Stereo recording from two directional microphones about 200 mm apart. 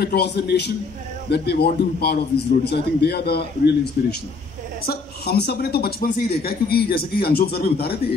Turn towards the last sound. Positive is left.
turn(degrees=50)  # may be behind; listen again after turning